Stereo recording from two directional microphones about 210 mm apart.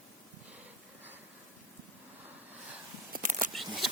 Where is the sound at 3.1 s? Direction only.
40° right (ahead or behind).